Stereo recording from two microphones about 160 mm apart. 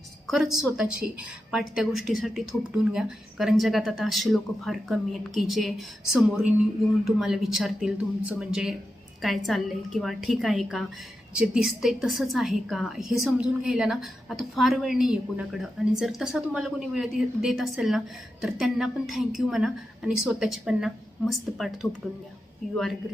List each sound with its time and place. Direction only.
0.3 s a woman's voice: centre (ahead or behind)
22.7 s a woman's voice: centre (ahead or behind)